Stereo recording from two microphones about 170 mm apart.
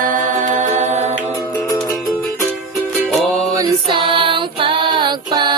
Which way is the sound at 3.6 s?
30° right (ahead or behind).